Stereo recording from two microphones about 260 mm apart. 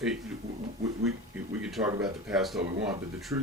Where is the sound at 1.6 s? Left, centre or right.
Centre.